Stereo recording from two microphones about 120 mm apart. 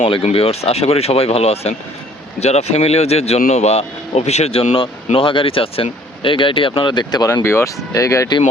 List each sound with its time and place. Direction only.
0.3 s speech: 55° left (ahead or behind); by 8.4 s 25° left (ahead or behind)